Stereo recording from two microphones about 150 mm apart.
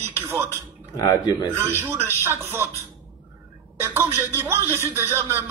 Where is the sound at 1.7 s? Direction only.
15° right (ahead or behind).